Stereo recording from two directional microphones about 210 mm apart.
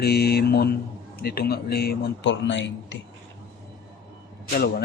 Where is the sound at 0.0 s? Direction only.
50° left (ahead or behind).